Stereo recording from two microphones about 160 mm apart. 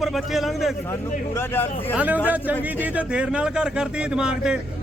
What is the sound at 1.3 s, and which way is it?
Speech, 15° left (ahead or behind).